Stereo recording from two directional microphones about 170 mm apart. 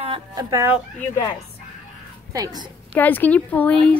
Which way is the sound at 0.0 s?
25° right (ahead or behind).